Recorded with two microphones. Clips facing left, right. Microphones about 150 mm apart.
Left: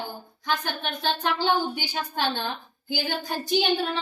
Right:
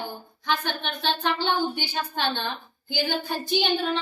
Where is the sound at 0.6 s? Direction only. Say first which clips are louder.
Even; 5° left (ahead or behind).